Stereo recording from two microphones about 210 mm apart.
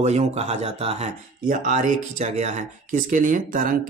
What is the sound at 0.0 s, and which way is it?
Speech, 30° right (ahead or behind).